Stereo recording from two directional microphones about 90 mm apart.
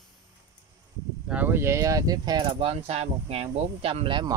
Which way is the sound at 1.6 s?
35° right (ahead or behind).